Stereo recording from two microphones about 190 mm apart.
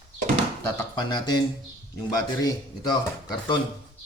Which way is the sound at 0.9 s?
25° left (ahead or behind).